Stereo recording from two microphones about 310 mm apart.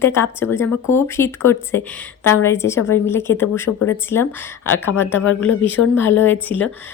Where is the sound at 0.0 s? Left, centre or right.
Centre.